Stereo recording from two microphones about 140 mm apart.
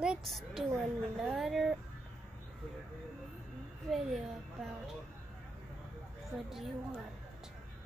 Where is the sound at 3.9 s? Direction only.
Centre (ahead or behind).